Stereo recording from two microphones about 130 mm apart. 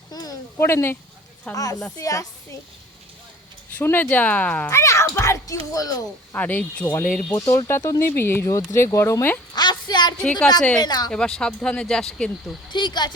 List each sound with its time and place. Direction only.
0.1 s a sound: 30° left (ahead or behind)
0.6 s speech: 20° left (ahead or behind)
2.0 s speech: 25° left (ahead or behind)
3.8 s speech: 15° left (ahead or behind)
4.7 s speech: 25° left (ahead or behind)
6.3 s speech: 10° left (ahead or behind)
7.3 s speech: 25° left (ahead or behind)
9.6 s a sound: 35° left (ahead or behind)
10.8 s speech: 30° left (ahead or behind)
11.1 s speech: 5° left (ahead or behind)
12.7 s speech: 35° left (ahead or behind)